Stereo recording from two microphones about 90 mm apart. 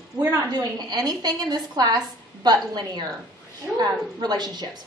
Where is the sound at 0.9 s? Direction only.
50° right (ahead or behind).